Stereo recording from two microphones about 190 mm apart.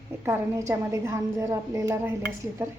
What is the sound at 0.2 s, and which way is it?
A woman's voice, 15° right (ahead or behind).